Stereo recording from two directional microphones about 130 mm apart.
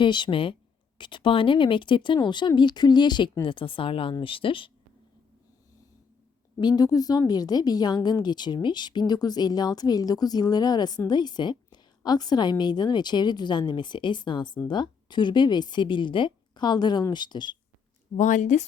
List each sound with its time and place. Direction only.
0.0 s a woman's voice: 35° left (ahead or behind)
6.6 s a woman's voice: 30° left (ahead or behind)
18.2 s speech: 70° left (ahead or behind)